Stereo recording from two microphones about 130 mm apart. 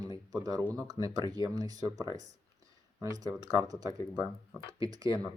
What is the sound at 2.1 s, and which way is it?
Speech, 65° right (ahead or behind).